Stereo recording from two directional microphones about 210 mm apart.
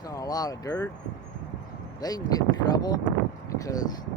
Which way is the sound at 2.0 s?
20° left (ahead or behind).